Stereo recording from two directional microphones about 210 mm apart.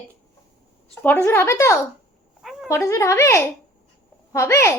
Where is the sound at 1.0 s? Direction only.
10° left (ahead or behind).